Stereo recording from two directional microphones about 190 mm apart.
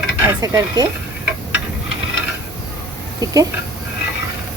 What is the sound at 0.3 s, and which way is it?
Stir, 15° right (ahead or behind).